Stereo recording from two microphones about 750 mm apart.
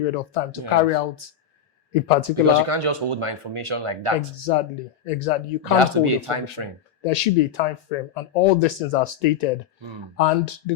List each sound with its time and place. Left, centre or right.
0.0 s speech: left
2.3 s speech: right
4.4 s speech: left
5.7 s speech: right
7.0 s speech: left